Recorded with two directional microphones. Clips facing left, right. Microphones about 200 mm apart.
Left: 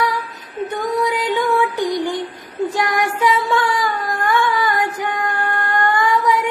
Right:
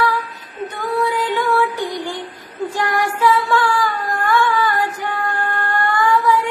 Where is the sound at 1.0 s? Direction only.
20° left (ahead or behind).